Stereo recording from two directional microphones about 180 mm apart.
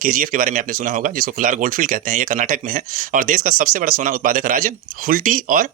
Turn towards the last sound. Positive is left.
turn(degrees=-50)  # may be behind; listen again after turning